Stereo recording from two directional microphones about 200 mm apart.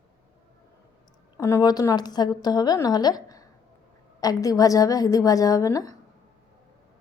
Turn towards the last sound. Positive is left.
turn(degrees=15)  # may be behind; listen again after turning